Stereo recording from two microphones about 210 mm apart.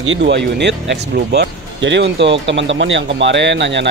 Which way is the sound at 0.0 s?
60° right (ahead or behind).